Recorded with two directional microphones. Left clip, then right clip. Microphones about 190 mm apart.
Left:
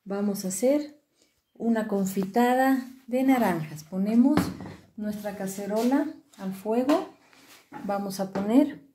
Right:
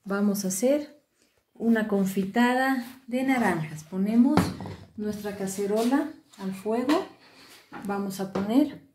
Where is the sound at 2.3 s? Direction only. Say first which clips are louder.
Left 2 dB; 35° left (ahead or behind).